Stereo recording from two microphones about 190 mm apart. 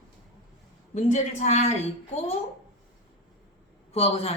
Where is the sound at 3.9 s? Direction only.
35° left (ahead or behind).